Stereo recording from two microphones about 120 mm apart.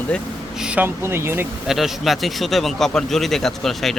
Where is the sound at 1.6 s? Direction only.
Centre (ahead or behind).